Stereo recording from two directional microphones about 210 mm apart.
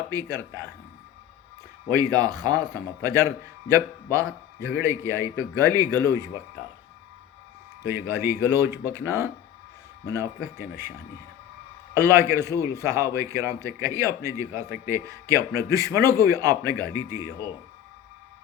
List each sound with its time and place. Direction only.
0.1 s speech: 15° right (ahead or behind)
1.9 s speech: 15° right (ahead or behind)
7.9 s speech: 10° right (ahead or behind)
10.6 s speech: 10° right (ahead or behind)
11.9 s speech: 15° right (ahead or behind)